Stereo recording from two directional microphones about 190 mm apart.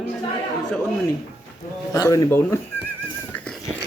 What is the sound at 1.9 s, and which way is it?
Speech, 15° left (ahead or behind).